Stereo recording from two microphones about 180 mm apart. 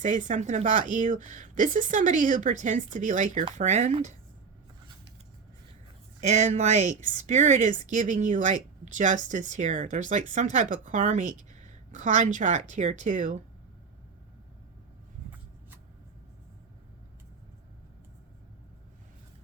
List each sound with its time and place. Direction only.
0.0 s a woman's voice: 45° right (ahead or behind)
6.1 s a woman's voice: 40° right (ahead or behind)